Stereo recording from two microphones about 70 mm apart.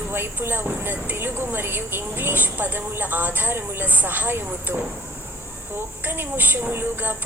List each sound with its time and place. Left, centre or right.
0.1 s speech: right
6.1 s speech: right